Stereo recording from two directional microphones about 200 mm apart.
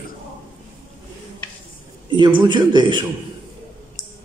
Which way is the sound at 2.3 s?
20° right (ahead or behind).